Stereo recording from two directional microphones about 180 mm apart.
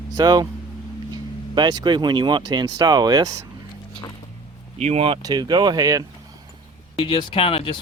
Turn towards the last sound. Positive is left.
turn(degrees=30)  # may be behind; listen again after turning